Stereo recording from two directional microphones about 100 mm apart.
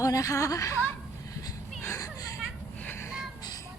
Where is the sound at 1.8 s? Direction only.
30° left (ahead or behind).